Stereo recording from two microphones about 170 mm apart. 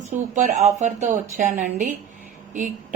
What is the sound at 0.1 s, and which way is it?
A woman's voice, 45° right (ahead or behind).